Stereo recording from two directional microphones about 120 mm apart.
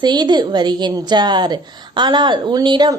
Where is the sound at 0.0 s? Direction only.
35° right (ahead or behind).